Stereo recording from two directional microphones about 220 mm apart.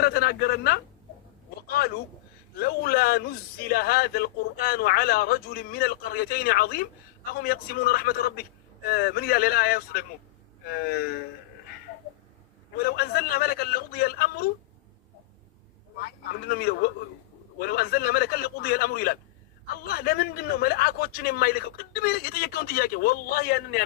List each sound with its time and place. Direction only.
0.0 s a man's voice: 45° left (ahead or behind)
12.7 s a man's voice: 45° left (ahead or behind)
16.0 s a man's voice: 45° left (ahead or behind)